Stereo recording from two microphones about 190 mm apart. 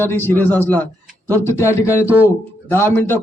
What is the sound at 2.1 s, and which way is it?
Speech, 10° right (ahead or behind).